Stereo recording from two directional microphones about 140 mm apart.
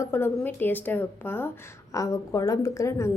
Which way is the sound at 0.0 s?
15° left (ahead or behind).